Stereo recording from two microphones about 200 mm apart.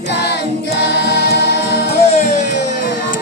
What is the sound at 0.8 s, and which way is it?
Music, 60° left (ahead or behind).